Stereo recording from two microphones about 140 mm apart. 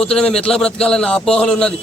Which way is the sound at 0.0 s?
5° left (ahead or behind).